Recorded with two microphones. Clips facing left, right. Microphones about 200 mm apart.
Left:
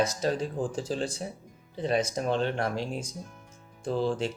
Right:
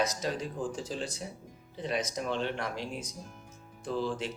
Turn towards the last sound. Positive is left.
turn(degrees=30)  # may be behind; listen again after turning